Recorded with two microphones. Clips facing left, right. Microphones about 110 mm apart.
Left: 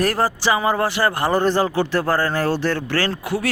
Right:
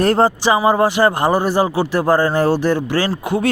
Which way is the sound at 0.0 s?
25° right (ahead or behind).